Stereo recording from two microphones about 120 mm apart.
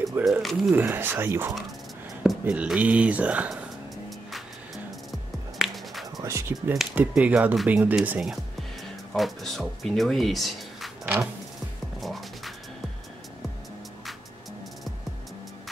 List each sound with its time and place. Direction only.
0.2 s speech: centre (ahead or behind)
0.7 s speech: 20° right (ahead or behind)
5.6 s music: centre (ahead or behind)
6.2 s speech: 25° right (ahead or behind)
7.0 s speech: 10° right (ahead or behind)
12.0 s music: centre (ahead or behind)